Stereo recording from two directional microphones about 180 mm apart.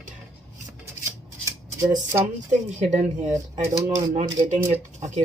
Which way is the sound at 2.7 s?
40° right (ahead or behind).